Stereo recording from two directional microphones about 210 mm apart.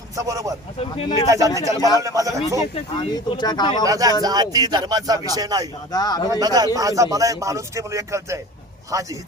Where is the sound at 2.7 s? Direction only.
20° left (ahead or behind).